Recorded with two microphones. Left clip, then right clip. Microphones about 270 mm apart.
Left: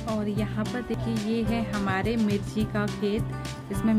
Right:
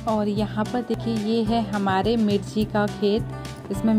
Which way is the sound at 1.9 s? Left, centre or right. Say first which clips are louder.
Right 6 dB; centre.